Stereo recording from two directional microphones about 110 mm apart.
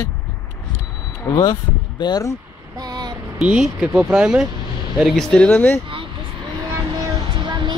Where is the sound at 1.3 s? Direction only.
40° left (ahead or behind).